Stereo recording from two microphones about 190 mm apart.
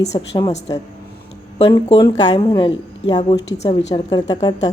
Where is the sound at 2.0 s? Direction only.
25° left (ahead or behind).